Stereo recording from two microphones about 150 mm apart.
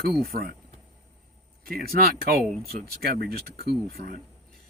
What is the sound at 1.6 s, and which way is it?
Speech, 90° right.